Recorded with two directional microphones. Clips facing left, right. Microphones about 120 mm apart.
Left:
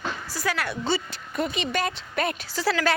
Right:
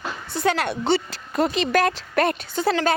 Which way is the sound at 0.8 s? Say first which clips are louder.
Right 5 dB; 70° right (ahead or behind).